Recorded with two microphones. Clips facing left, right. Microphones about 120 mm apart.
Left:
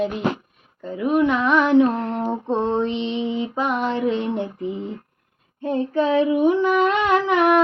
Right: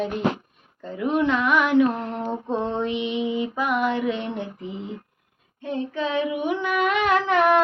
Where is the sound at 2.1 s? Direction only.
20° left (ahead or behind).